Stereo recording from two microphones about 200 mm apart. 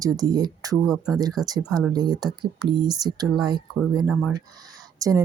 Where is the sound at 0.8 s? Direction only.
Centre (ahead or behind).